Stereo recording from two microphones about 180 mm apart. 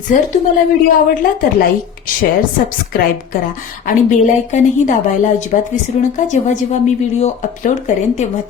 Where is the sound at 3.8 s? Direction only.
45° left (ahead or behind).